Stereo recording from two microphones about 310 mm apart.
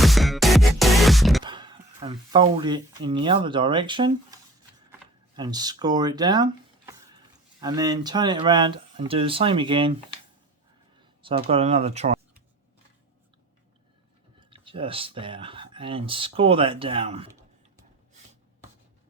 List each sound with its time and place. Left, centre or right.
0.0 s music: centre
1.5 s speech: centre
5.4 s speech: centre
11.0 s speech: centre
14.3 s speech: centre